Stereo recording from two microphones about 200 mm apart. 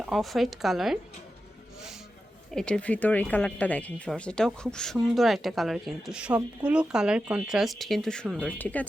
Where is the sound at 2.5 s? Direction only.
5° left (ahead or behind).